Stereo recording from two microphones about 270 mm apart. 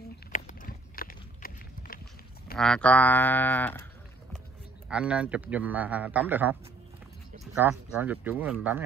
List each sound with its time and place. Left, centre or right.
0.3 s clip-clop: left
2.5 s speech: centre
4.8 s a man's voice: centre
7.5 s speech: centre